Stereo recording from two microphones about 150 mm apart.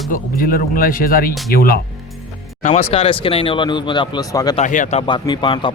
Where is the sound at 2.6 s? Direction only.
45° left (ahead or behind); by 4.5 s 25° left (ahead or behind).